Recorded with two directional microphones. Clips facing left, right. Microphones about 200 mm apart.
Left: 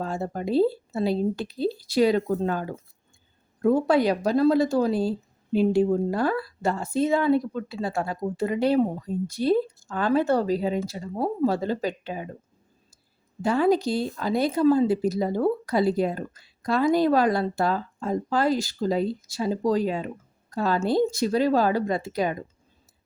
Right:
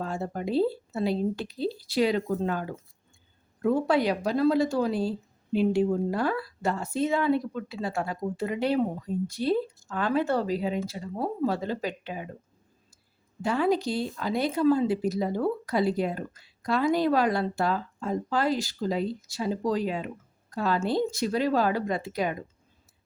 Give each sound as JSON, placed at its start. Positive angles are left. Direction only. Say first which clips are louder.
{"t": 0.0, "sound": "speech", "louder": "left 2 dB", "side_deg": 35}
{"t": 13.4, "sound": "speech", "louder": "left 4 dB", "side_deg": 40}